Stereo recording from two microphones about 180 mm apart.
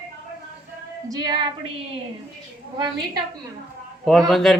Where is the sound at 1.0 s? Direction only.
20° right (ahead or behind).